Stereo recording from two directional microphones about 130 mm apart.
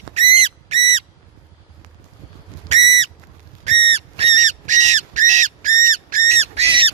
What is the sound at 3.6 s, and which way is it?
Whistle, 55° right (ahead or behind).